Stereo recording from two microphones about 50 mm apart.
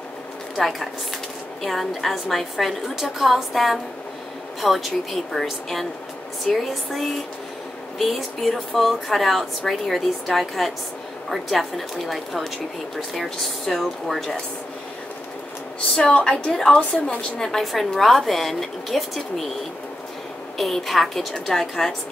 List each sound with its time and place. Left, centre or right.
0.6 s a woman's voice: centre
16.0 s a woman's voice: centre
20.5 s a woman's voice: centre